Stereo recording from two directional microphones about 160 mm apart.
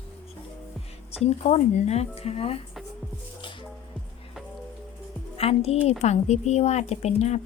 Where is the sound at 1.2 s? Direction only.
45° left (ahead or behind).